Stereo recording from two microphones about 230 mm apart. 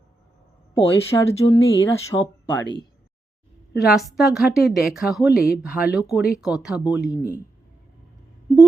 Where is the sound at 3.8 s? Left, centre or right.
Centre.